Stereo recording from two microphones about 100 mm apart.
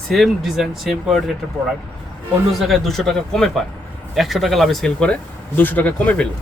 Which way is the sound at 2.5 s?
Centre (ahead or behind).